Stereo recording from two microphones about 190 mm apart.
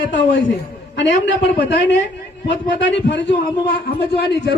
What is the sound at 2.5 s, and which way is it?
A man's voice, 70° left (ahead or behind).